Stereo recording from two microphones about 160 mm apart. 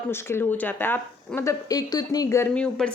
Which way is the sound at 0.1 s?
15° left (ahead or behind).